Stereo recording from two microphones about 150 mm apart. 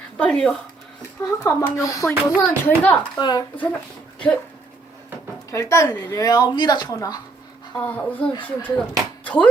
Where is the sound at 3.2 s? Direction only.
25° left (ahead or behind).